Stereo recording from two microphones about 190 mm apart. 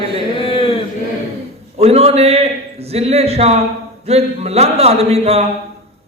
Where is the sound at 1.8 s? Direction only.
30° right (ahead or behind).